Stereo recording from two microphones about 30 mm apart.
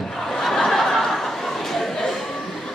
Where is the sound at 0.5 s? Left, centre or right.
Centre.